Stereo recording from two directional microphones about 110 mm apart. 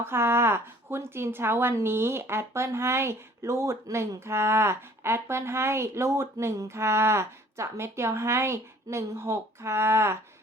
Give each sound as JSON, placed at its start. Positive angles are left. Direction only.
{"t": 0.0, "sound": "a woman's voice", "side_deg": -20}